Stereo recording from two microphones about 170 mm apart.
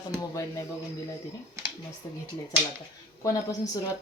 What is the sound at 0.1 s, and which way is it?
Speech, 20° left (ahead or behind).